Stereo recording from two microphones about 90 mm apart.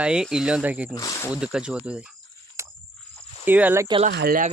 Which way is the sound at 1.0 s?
40° left (ahead or behind).